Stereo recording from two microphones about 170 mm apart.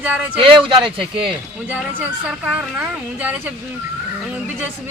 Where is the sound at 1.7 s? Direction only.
5° right (ahead or behind).